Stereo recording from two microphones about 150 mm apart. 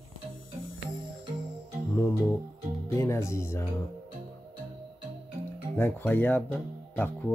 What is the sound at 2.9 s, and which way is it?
Speech, 20° left (ahead or behind).